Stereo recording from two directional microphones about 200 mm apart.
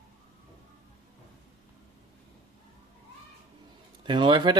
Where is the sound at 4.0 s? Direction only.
25° right (ahead or behind).